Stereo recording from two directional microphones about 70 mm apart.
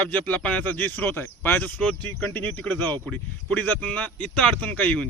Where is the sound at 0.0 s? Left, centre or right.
Left.